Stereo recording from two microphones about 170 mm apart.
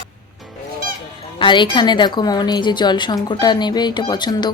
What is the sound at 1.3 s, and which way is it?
Speech, 30° left (ahead or behind).